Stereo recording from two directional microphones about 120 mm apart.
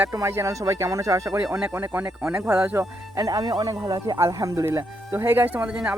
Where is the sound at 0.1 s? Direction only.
25° right (ahead or behind).